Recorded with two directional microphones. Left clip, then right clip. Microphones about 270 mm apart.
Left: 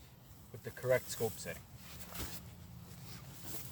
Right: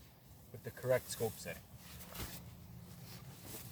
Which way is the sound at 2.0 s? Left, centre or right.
Centre.